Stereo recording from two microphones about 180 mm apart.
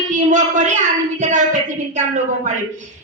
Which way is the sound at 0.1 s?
45° right (ahead or behind).